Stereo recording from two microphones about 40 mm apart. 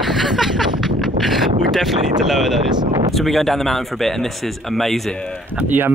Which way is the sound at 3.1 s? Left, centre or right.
Centre.